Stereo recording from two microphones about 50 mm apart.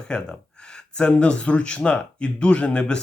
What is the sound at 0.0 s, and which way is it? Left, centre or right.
Speech, centre.